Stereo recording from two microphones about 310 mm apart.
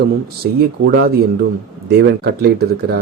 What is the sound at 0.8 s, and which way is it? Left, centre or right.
Speech, right.